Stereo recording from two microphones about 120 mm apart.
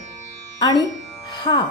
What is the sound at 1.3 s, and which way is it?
Speech, 40° left (ahead or behind).